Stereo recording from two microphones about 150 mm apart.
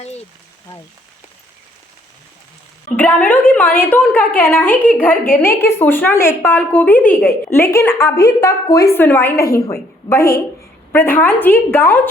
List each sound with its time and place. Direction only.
2.9 s a woman's voice: 10° left (ahead or behind)